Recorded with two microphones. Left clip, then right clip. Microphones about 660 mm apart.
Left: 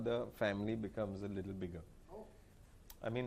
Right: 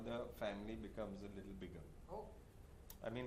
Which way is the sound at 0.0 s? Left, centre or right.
Left.